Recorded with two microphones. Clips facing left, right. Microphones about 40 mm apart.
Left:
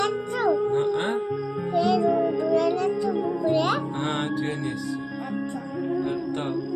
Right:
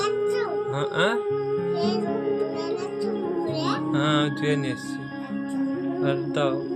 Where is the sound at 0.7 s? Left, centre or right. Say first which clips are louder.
Even; right.